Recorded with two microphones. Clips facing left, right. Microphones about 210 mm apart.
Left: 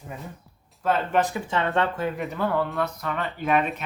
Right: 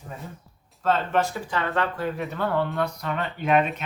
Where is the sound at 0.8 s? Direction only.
15° left (ahead or behind).